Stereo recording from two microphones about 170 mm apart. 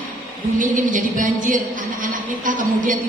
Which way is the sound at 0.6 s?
50° right (ahead or behind).